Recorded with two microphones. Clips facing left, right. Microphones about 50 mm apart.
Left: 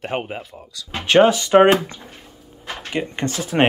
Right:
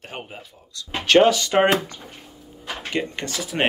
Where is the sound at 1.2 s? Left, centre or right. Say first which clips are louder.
Left 5 dB; centre.